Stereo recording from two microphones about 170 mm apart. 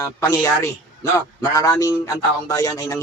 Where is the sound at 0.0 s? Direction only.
15° left (ahead or behind).